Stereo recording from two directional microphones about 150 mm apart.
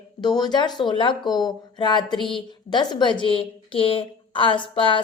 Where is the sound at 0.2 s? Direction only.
30° left (ahead or behind).